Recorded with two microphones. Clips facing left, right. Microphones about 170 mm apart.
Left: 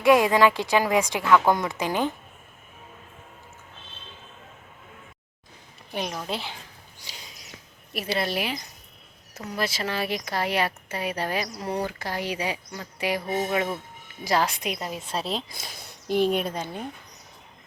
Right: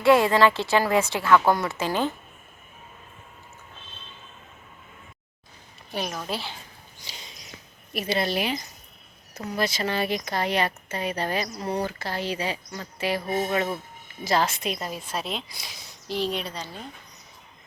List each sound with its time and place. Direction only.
0.0 s a woman's voice: 15° left (ahead or behind)
5.9 s a child's voice: 20° left (ahead or behind)
7.0 s a sound: 10° left (ahead or behind)
7.9 s a woman's voice: 5° left (ahead or behind); by 16.6 s 50° left (ahead or behind)